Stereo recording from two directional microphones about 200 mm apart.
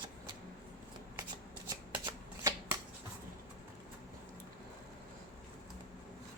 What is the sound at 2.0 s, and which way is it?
Shuffling cards, 20° right (ahead or behind).